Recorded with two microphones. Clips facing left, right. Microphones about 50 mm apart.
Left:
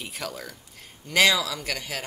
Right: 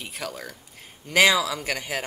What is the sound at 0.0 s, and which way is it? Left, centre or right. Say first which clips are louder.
A woman's voice: right 1 dB; centre.